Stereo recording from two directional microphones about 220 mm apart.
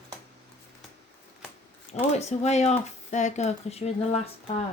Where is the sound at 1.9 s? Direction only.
30° left (ahead or behind).